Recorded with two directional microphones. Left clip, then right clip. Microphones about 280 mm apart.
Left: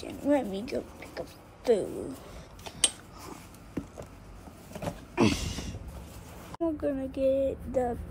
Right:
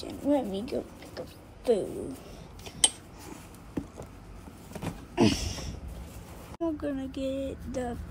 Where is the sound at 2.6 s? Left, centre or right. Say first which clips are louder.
Right 2 dB; centre.